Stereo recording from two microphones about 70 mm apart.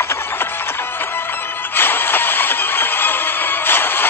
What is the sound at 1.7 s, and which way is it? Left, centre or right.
Music, left.